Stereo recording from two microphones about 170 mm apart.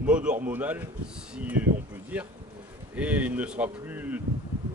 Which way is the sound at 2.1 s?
5° right (ahead or behind).